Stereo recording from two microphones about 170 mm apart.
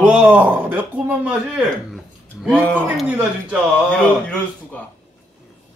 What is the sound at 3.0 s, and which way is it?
Speech, 5° right (ahead or behind).